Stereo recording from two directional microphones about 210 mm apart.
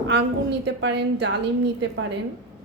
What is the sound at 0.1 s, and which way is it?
A woman's voice, 55° right (ahead or behind).